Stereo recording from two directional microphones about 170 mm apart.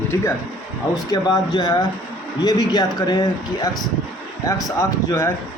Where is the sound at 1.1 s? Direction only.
20° left (ahead or behind).